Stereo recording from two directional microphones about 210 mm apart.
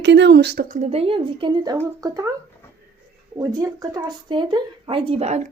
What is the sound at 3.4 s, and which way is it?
Speech, 15° right (ahead or behind).